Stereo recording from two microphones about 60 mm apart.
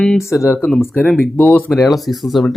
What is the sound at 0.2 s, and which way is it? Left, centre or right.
Speech, left.